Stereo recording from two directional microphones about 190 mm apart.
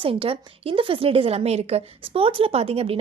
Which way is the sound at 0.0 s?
30° right (ahead or behind).